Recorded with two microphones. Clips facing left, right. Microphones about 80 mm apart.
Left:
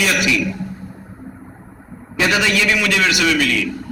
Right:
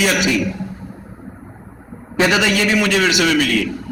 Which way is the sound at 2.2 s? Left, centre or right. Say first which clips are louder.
Even; right.